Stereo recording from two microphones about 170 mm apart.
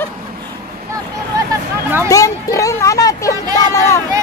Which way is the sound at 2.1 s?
20° left (ahead or behind).